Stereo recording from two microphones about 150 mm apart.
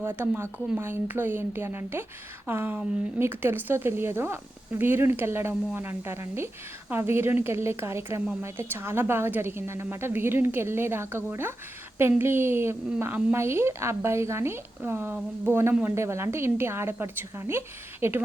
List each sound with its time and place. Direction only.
0.0 s a woman's voice: 15° right (ahead or behind)